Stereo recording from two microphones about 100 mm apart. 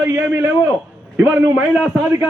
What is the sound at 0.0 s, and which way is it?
A man's voice, 20° right (ahead or behind).